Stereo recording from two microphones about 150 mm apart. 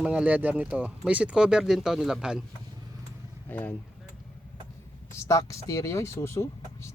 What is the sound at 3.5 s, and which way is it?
Speech, 10° left (ahead or behind).